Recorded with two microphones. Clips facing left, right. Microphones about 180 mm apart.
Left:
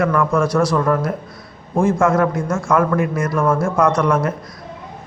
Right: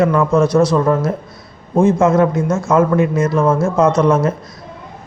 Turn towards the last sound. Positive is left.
turn(degrees=-25)  # may be behind; listen again after turning